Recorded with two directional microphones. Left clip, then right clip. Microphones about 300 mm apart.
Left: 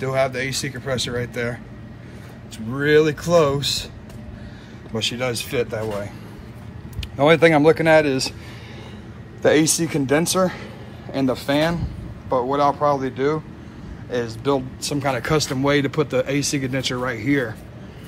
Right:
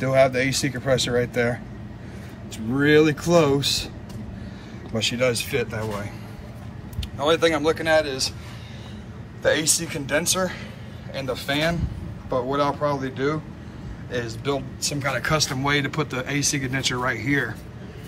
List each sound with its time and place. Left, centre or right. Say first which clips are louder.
0.0 s speech: right 3 dB; centre
4.9 s speech: right 1 dB; centre
7.0 s speech: left 6 dB; left
9.8 s speech: left 5 dB; centre